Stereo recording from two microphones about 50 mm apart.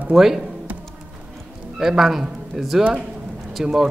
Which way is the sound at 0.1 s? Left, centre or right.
Centre.